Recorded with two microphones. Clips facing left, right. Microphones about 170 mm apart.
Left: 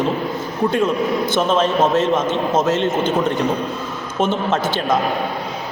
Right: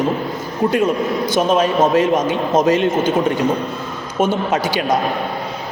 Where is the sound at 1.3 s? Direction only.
10° right (ahead or behind).